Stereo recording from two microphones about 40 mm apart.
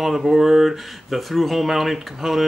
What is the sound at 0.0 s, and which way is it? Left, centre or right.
Speech, centre.